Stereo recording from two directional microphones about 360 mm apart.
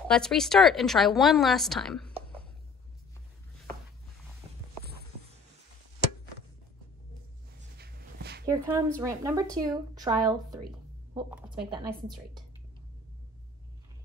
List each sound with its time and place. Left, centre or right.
0.1 s a woman's voice: centre
7.7 s a sound: right
8.5 s a woman's voice: centre